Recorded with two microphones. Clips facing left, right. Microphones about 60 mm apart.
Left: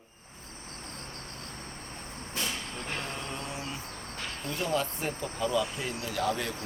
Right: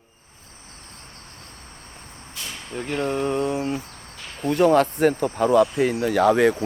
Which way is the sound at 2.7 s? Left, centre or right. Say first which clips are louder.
Right 12 dB; right.